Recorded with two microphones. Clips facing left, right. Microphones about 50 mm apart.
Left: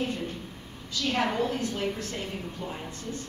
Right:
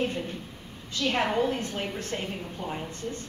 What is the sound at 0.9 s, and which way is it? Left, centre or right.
A woman's voice, right.